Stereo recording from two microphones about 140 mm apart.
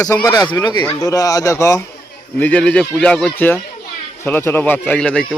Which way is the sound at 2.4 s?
10° left (ahead or behind).